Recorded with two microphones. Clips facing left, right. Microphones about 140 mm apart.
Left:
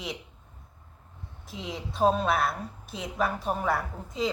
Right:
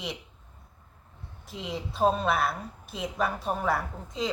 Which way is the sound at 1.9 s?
Centre (ahead or behind).